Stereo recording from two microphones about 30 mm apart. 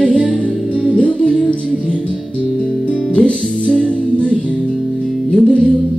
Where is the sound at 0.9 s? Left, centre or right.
Left.